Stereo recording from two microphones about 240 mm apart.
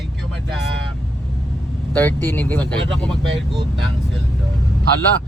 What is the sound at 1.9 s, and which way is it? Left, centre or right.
Speech, centre.